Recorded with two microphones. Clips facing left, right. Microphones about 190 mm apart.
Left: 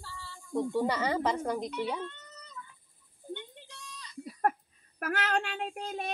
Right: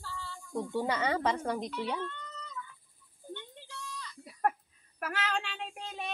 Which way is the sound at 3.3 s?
20° left (ahead or behind).